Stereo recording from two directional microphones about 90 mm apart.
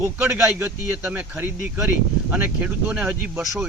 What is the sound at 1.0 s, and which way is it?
Speech, 15° right (ahead or behind).